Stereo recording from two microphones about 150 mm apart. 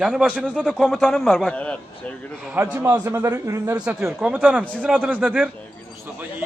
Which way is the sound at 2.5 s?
15° right (ahead or behind).